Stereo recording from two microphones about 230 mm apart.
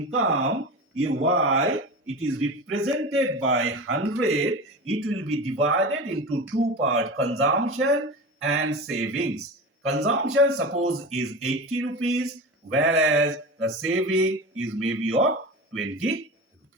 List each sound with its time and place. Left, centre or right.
0.1 s speech: right